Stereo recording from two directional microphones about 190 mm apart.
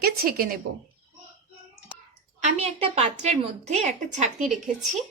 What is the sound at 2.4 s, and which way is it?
A woman's voice, 35° right (ahead or behind).